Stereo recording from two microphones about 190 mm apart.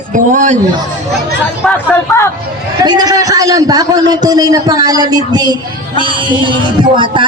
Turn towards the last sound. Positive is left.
turn(degrees=-25)  # may be behind; listen again after turning